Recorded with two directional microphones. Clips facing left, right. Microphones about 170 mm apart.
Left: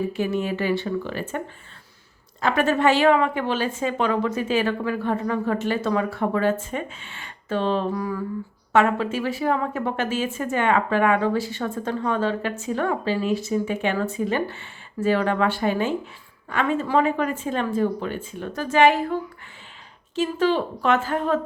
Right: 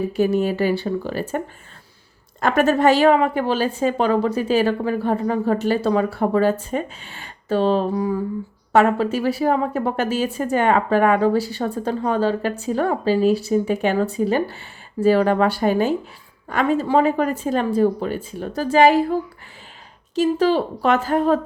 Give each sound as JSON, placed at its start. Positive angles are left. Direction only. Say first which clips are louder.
{"t": 0.1, "sound": "a woman's voice", "louder": "right 6 dB", "side_deg": -40}
{"t": 2.4, "sound": "a woman's voice", "louder": "right 4 dB", "side_deg": -45}
{"t": 7.9, "sound": "a sound", "louder": "right 5 dB", "side_deg": -25}
{"t": 8.7, "sound": "a woman's voice", "louder": "right 3 dB", "side_deg": -35}
{"t": 20.1, "sound": "a woman's voice", "louder": "right 4 dB", "side_deg": -35}